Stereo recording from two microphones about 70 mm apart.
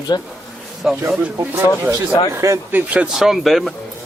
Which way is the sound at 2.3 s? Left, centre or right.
Right.